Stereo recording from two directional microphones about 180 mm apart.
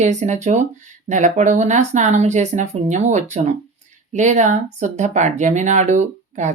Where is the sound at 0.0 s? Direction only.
40° right (ahead or behind).